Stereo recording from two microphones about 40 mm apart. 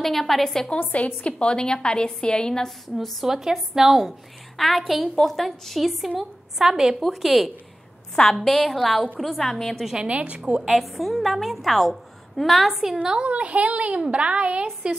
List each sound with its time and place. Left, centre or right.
0.0 s a woman's voice: centre
0.7 s a woman's voice: left; by 3.3 s centre
3.3 s a woman's voice: centre
9.9 s a woman's voice: right
10.7 s a woman's voice: centre
13.0 s a woman's voice: centre
13.3 s a woman's voice: right